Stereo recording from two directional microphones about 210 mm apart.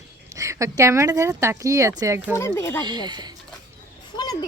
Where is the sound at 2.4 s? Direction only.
15° left (ahead or behind).